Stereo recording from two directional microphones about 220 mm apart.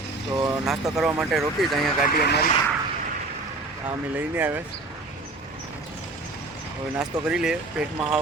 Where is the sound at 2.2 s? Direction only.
45° left (ahead or behind).